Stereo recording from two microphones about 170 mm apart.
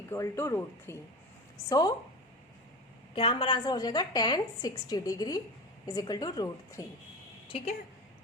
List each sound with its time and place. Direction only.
0.1 s speech: 15° left (ahead or behind)
3.2 s a woman's voice: 30° left (ahead or behind)
7.4 s a woman's voice: 35° left (ahead or behind)